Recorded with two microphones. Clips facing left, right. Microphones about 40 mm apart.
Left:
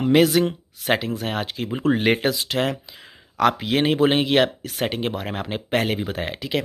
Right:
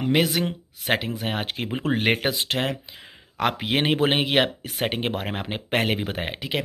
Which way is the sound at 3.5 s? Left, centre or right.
Right.